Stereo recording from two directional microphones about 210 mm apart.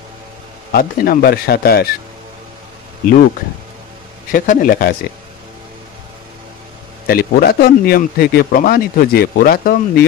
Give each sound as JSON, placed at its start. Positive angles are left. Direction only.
{"t": 0.7, "sound": "speech", "side_deg": 40}
{"t": 4.3, "sound": "a man's voice", "side_deg": 40}
{"t": 7.1, "sound": "speech", "side_deg": 45}